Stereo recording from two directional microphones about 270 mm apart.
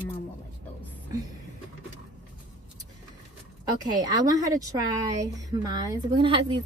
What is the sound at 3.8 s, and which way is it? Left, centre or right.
A woman's voice, centre.